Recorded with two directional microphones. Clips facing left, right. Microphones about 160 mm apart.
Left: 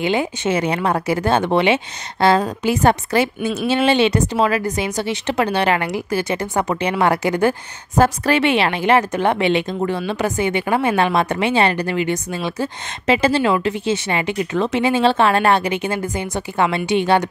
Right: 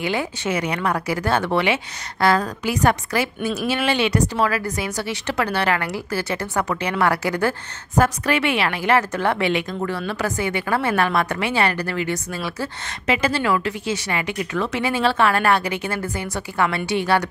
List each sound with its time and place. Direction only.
0.0 s a woman's voice: 25° left (ahead or behind)